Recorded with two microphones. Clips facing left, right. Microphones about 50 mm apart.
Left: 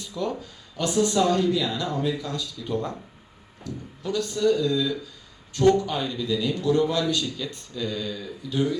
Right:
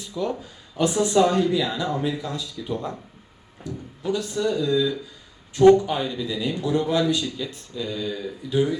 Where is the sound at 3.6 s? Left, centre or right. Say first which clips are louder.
Right 4 dB; centre.